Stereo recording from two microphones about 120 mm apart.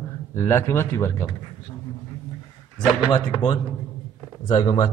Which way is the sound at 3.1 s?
40° left (ahead or behind).